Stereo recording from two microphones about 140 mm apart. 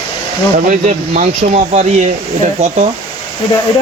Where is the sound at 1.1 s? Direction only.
55° right (ahead or behind).